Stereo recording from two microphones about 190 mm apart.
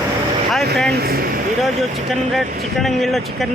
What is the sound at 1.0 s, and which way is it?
Speech, 50° right (ahead or behind).